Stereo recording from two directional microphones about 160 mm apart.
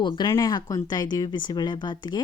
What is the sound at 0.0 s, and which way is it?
Speech, 25° left (ahead or behind).